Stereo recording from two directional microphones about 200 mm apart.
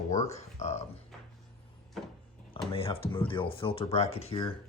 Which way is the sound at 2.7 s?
30° left (ahead or behind).